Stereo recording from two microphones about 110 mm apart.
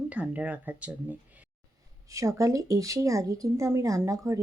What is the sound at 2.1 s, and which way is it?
Speech, 30° right (ahead or behind).